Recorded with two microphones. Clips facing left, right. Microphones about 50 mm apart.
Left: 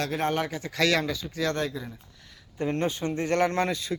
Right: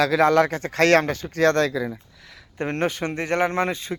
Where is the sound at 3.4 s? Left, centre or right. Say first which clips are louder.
Right 4 dB; right.